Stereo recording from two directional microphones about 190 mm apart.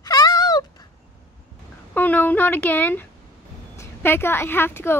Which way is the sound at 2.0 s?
10° left (ahead or behind).